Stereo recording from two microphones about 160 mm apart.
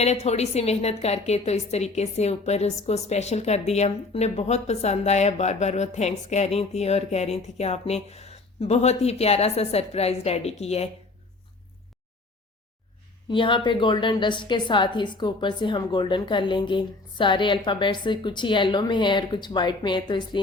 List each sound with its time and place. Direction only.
0.0 s a woman's voice: 40° left (ahead or behind)
13.3 s a woman's voice: 30° left (ahead or behind)